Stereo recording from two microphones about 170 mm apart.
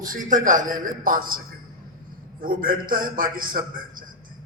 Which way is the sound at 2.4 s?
55° right (ahead or behind).